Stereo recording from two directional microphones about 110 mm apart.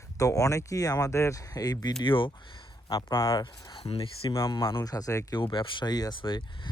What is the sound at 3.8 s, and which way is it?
Speech, 60° left (ahead or behind).